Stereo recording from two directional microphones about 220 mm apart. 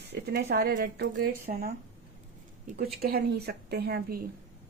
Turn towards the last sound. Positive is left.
turn(degrees=-45)  # may be behind; listen again after turning